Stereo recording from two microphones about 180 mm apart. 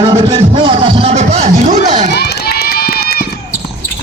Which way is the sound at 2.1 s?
65° left (ahead or behind).